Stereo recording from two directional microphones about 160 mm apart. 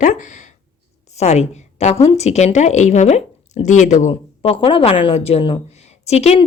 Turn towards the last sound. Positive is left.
turn(degrees=45)  # may be behind; listen again after turning